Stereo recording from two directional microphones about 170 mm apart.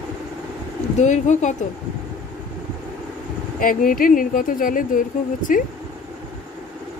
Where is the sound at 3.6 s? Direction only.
55° left (ahead or behind).